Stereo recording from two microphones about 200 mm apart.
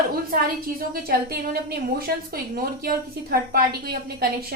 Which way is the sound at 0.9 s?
50° right (ahead or behind).